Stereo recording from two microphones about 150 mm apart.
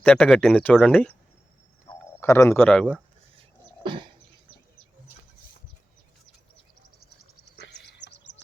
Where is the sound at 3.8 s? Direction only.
35° right (ahead or behind).